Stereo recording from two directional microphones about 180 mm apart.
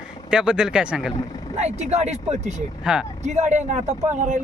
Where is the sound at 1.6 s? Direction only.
40° right (ahead or behind).